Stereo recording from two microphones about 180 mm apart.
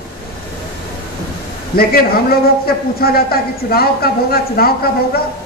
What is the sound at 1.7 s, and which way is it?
Speech, 55° left (ahead or behind).